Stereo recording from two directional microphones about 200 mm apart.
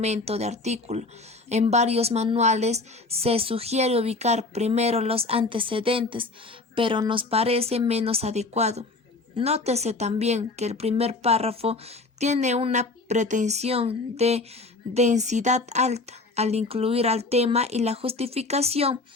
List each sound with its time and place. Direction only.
0.0 s speech: 35° right (ahead or behind)